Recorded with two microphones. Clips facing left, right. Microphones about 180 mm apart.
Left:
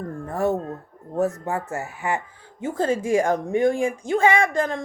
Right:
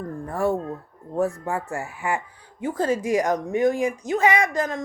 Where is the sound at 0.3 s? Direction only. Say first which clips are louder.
Left 1 dB; 20° left (ahead or behind).